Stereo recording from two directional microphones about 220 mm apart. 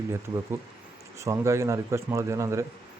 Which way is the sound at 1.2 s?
15° right (ahead or behind).